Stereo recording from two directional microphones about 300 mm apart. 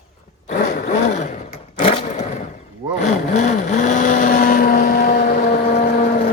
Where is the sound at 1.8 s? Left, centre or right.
Centre.